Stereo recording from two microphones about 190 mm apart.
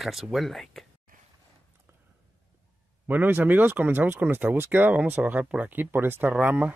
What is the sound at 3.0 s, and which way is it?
Speech, 10° right (ahead or behind).